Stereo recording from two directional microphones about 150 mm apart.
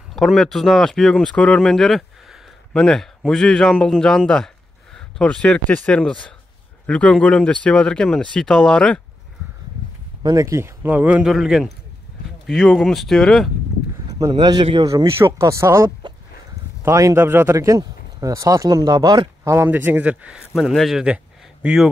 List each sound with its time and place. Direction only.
0.1 s speech: centre (ahead or behind)
10.2 s speech: 20° right (ahead or behind); by 13.5 s centre (ahead or behind)
14.3 s a man's voice: 30° right (ahead or behind)
15.0 s speech: 15° right (ahead or behind)